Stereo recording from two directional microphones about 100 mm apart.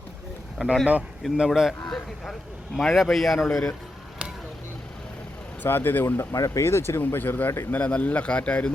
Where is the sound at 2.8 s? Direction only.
5° left (ahead or behind).